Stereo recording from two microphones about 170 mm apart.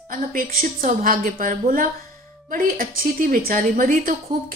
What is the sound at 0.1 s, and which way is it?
A woman's voice, 55° right (ahead or behind).